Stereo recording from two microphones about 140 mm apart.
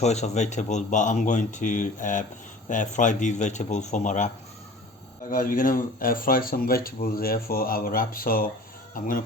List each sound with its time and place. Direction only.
0.0 s speech: 55° left (ahead or behind)
5.3 s speech: 75° left (ahead or behind); by 8.4 s 90° left